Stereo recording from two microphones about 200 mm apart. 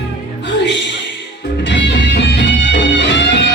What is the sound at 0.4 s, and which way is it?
Music, 65° left (ahead or behind).